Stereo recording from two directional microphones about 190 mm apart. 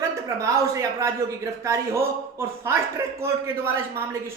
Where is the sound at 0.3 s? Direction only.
15° right (ahead or behind).